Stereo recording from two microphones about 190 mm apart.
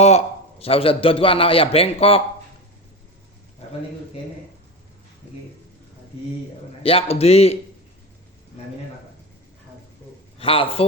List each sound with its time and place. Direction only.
0.0 s a man's voice: 35° left (ahead or behind)
6.8 s a man's voice: 30° left (ahead or behind)
10.3 s a man's voice: 30° left (ahead or behind)